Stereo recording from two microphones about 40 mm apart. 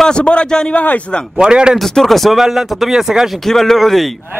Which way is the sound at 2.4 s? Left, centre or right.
Centre.